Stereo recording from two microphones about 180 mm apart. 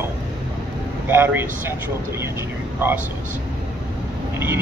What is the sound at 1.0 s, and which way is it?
Speech, 10° right (ahead or behind).